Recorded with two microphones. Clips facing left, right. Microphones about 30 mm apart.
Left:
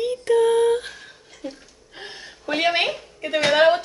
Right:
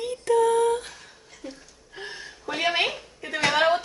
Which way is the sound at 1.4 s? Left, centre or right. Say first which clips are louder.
Left 5 dB; left.